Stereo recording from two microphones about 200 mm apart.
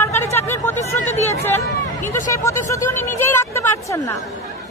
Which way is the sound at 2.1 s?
15° left (ahead or behind).